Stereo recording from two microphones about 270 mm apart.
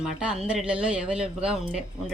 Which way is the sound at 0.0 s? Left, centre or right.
Centre.